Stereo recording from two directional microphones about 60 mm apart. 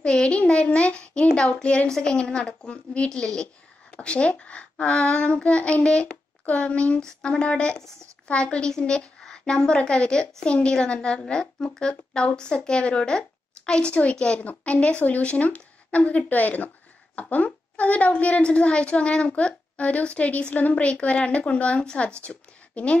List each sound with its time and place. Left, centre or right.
0.0 s a child's voice: centre
7.0 s a child's voice: centre